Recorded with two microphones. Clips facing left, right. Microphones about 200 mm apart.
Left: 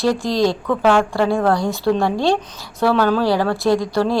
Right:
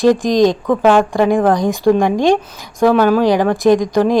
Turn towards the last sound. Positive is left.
turn(degrees=-15)  # may be behind; listen again after turning